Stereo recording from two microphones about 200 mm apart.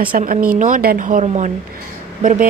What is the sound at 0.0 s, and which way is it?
Speech, 45° right (ahead or behind).